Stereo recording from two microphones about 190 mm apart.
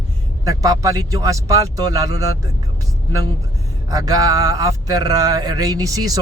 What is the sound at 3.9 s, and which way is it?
Speech, 20° right (ahead or behind).